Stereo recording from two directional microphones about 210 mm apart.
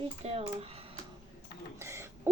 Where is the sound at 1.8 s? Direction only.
15° right (ahead or behind).